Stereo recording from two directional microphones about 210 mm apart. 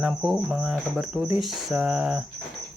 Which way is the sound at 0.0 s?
5° right (ahead or behind).